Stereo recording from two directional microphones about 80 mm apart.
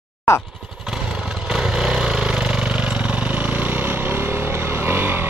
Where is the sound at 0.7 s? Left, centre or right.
Centre.